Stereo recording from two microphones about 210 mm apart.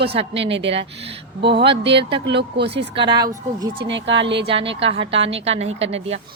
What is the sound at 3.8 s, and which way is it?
Speech, 60° right (ahead or behind).